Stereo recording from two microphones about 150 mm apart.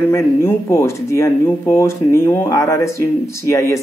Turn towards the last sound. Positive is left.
turn(degrees=20)  # may be behind; listen again after turning